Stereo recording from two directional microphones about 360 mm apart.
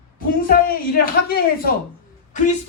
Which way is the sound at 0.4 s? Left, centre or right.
Left.